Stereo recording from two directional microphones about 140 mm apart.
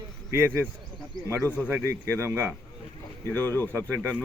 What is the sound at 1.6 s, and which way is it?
Speech, 20° right (ahead or behind).